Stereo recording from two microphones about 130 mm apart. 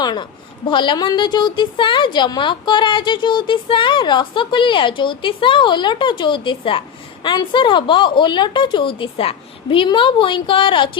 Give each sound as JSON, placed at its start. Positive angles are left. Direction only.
{"t": 0.0, "sound": "a woman's voice", "side_deg": 35}